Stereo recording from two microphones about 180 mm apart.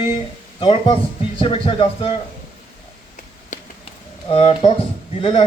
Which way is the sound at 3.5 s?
40° left (ahead or behind).